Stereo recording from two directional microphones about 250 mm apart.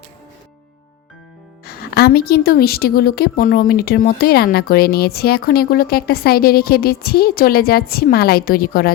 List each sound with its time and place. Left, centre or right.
1.6 s speech: left